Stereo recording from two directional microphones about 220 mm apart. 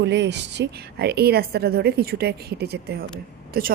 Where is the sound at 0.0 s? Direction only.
50° right (ahead or behind).